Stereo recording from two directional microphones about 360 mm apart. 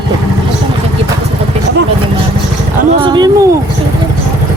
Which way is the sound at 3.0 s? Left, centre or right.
Centre.